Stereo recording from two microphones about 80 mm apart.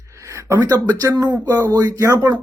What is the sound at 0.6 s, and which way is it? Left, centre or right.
A man's voice, right.